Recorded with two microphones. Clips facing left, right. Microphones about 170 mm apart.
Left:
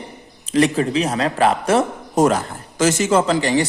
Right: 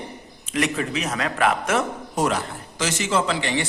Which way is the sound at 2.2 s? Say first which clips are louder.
Left 7 dB; 45° left (ahead or behind).